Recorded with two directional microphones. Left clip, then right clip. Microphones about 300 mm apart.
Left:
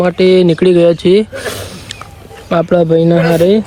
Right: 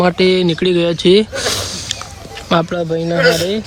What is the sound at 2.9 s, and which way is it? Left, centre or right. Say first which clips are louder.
Speech: left 3 dB; left.